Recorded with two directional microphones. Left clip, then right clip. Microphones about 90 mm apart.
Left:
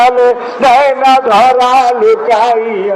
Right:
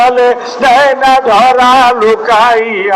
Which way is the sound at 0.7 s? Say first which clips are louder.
Right 1 dB; 25° right (ahead or behind).